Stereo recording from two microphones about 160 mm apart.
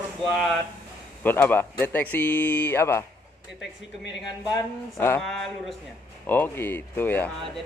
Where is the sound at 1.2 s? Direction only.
10° left (ahead or behind).